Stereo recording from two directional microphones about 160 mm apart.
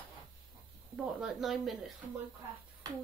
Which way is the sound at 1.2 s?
Centre (ahead or behind).